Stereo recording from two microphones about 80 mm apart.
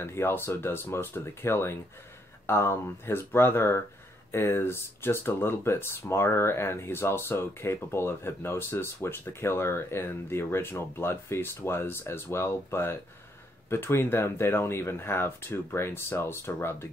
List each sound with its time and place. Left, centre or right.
0.0 s speech: left